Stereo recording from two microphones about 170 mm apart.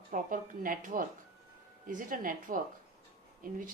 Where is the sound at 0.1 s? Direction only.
55° right (ahead or behind).